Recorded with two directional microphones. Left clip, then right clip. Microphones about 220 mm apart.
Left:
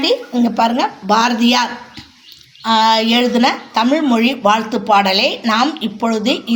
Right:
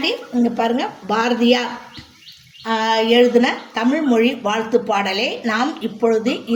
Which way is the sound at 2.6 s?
25° left (ahead or behind).